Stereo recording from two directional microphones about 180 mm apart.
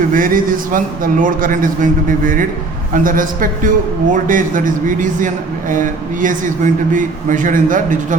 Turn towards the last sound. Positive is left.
turn(degrees=-45)  # may be behind; listen again after turning